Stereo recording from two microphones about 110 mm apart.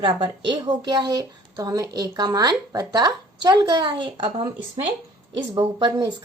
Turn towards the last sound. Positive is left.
turn(degrees=-45)  # may be behind; listen again after turning